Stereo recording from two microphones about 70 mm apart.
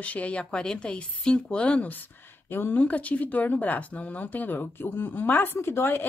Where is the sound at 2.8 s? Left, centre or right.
Left.